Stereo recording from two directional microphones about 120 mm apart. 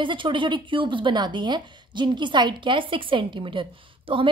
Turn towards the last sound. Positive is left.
turn(degrees=-45)  # may be behind; listen again after turning